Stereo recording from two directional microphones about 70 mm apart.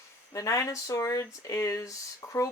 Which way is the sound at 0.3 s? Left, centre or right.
Left.